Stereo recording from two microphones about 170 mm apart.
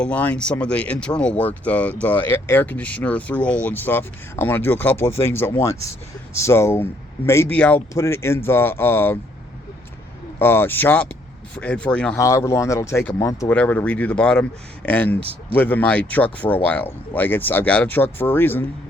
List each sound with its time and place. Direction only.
0.0 s speech: 10° left (ahead or behind)
10.3 s speech: 15° left (ahead or behind)
12.1 s speech: 15° left (ahead or behind)